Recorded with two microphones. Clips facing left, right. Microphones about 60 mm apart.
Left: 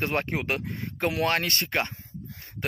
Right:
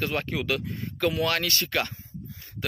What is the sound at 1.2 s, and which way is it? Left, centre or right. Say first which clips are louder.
Speech: left 1 dB; left.